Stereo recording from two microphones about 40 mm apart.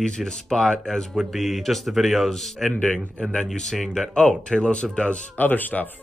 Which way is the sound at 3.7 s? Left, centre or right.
Centre.